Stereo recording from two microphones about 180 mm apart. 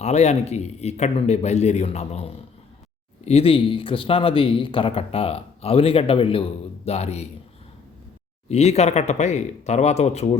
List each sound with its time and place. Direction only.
0.0 s speech: 40° left (ahead or behind)
8.4 s speech: 35° left (ahead or behind)